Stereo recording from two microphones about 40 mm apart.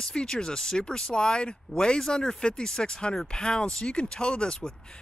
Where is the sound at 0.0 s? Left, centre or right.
Centre.